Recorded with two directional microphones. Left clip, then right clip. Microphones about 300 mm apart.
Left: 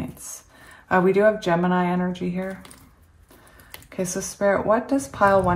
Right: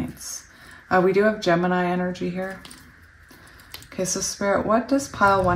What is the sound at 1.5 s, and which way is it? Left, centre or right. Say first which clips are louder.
Speech: right 1 dB; centre.